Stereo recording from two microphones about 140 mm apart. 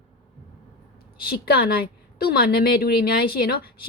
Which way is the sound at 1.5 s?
90° left.